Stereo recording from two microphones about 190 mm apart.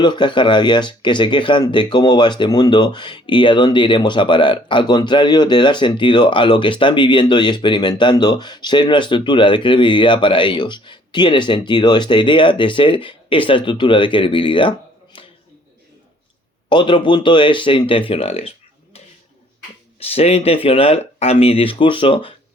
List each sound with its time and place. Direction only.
0.0 s speech: 25° left (ahead or behind)
16.6 s speech: 25° left (ahead or behind)
20.0 s speech: 30° left (ahead or behind)